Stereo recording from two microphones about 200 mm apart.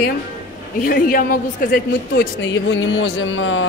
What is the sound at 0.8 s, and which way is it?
A woman's voice, 45° left (ahead or behind).